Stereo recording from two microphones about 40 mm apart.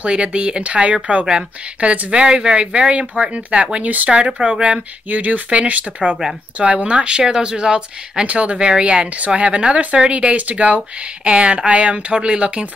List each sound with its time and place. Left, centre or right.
0.0 s speech: right
3.8 s speech: right
4.1 s speech: right
5.1 s speech: right